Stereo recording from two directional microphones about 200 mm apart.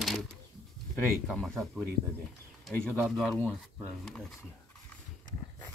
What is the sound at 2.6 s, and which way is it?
Speech, centre (ahead or behind).